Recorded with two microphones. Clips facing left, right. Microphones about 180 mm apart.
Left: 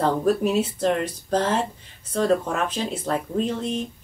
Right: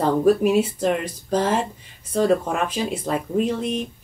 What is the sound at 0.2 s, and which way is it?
Speech, 10° right (ahead or behind).